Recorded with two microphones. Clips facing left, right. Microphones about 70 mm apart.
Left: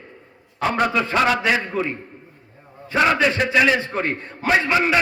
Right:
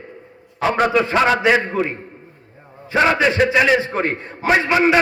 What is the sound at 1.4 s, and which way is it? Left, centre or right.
Speech, right.